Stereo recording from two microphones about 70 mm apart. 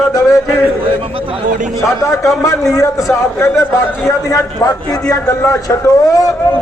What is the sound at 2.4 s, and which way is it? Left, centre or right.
A man's voice, left.